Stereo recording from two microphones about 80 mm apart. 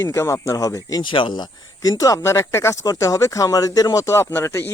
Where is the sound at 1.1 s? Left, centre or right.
Left.